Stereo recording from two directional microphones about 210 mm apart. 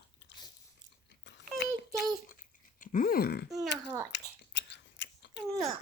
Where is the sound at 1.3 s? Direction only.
55° left (ahead or behind).